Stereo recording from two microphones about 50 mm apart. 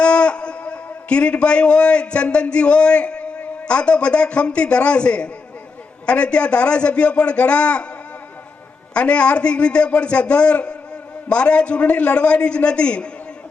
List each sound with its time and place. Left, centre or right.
0.0 s a man's voice: left
8.9 s a man's voice: left